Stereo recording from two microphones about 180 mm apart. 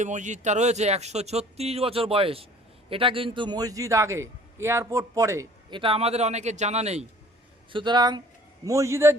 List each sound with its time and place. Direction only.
0.0 s a man's voice: 45° right (ahead or behind); by 5.8 s 15° right (ahead or behind)
5.8 s speech: 35° right (ahead or behind)
7.7 s a man's voice: 25° right (ahead or behind)